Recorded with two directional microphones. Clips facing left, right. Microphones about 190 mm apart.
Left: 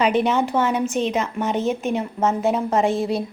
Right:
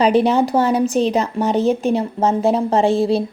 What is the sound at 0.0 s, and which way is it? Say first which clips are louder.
Speech: right 5 dB; 35° right (ahead or behind).